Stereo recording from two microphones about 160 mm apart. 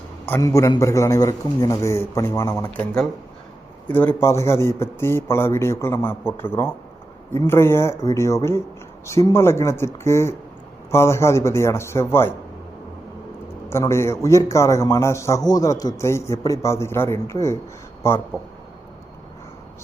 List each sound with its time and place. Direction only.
0.3 s a man's voice: 15° left (ahead or behind)
3.8 s a man's voice: 10° left (ahead or behind)
13.7 s a man's voice: 15° left (ahead or behind)